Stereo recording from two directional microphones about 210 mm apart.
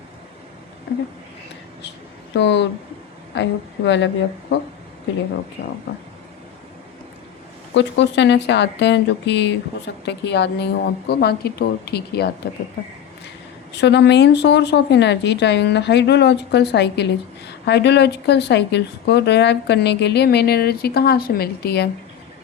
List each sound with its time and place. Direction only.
2.3 s speech: 55° left (ahead or behind)
7.7 s speech: 55° left (ahead or behind)
13.7 s speech: 55° left (ahead or behind)